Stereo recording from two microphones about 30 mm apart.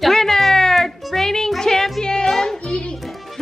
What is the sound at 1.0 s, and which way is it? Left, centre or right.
Music, centre.